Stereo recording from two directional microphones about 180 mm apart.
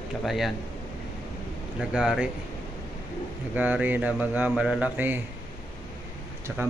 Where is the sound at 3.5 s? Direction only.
10° right (ahead or behind).